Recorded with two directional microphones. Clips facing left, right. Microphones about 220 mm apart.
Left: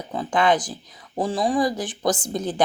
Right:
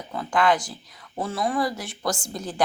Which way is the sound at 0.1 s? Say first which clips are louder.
Left 2 dB; 20° left (ahead or behind).